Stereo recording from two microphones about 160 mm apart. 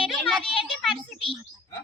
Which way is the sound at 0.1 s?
5° left (ahead or behind).